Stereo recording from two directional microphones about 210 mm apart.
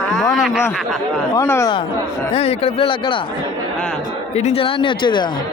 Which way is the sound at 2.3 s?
25° left (ahead or behind).